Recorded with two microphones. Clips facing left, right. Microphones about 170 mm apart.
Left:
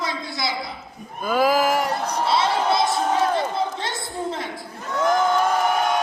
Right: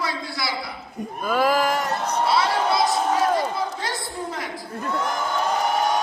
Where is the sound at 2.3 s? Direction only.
25° left (ahead or behind).